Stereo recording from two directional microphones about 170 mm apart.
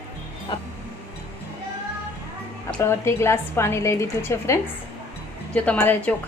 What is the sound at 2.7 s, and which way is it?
A woman's voice, 15° left (ahead or behind).